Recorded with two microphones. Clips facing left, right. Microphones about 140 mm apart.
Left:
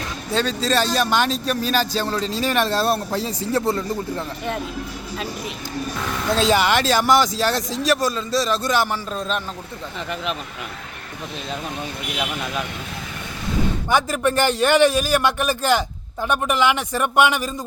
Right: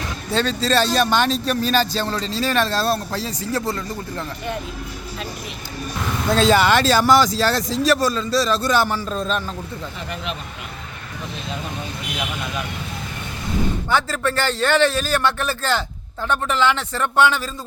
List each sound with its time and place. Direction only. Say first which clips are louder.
0.3 s a man's voice: right 1 dB; 5° left (ahead or behind); by 3.8 s 25° left (ahead or behind)
6.3 s a man's voice: right 2 dB; 15° left (ahead or behind)
13.9 s a man's voice: left 3 dB; 15° left (ahead or behind)